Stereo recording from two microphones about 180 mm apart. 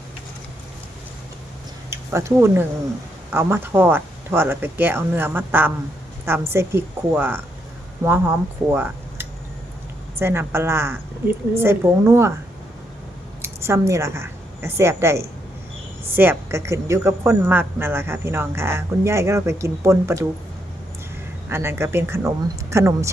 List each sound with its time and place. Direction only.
1.9 s a woman's voice: 15° right (ahead or behind)
13.4 s a woman's voice: 15° right (ahead or behind)
21.5 s a woman's voice: 15° right (ahead or behind)